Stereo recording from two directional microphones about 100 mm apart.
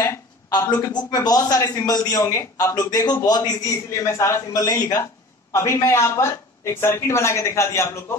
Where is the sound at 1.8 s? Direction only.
40° left (ahead or behind).